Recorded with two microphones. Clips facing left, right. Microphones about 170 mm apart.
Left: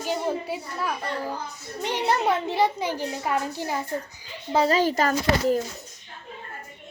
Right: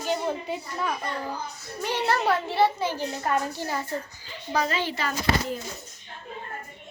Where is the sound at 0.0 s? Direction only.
10° left (ahead or behind).